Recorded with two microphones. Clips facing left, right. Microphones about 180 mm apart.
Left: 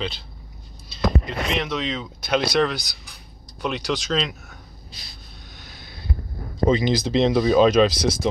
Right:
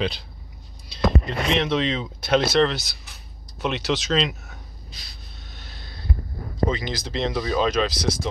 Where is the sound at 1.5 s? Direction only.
5° left (ahead or behind).